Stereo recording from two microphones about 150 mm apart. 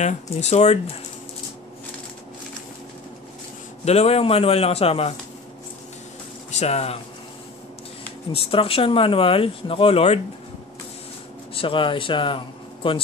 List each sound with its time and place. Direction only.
0.0 s speech: 50° left (ahead or behind)
3.8 s speech: 45° left (ahead or behind)
6.6 s speech: 45° left (ahead or behind)
8.3 s speech: 40° left (ahead or behind)
11.5 s a man's voice: 35° left (ahead or behind)